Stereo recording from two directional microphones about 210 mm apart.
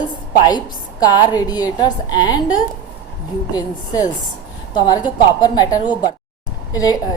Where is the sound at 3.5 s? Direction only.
20° left (ahead or behind).